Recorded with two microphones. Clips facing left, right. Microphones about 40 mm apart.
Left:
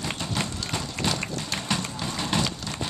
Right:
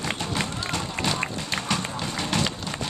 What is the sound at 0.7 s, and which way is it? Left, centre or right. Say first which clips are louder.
Run: right 1 dB; centre.